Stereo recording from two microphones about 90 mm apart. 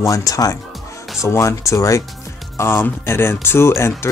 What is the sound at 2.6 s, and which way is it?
Speech, 25° left (ahead or behind).